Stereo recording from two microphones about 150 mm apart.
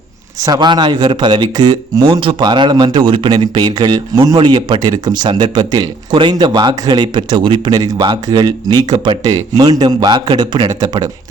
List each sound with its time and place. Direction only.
0.3 s speech: 25° right (ahead or behind)